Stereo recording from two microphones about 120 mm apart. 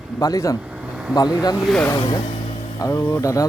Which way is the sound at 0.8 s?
5° right (ahead or behind).